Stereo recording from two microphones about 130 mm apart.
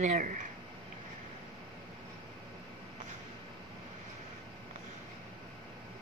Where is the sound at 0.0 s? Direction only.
90° right.